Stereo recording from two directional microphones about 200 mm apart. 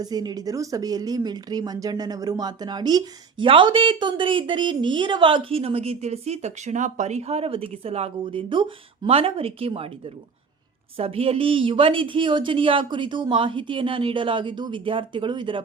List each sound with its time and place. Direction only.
0.0 s speech: 20° right (ahead or behind)
10.9 s speech: 30° right (ahead or behind)